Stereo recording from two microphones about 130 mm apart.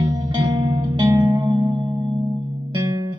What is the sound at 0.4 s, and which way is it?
Music, 35° right (ahead or behind).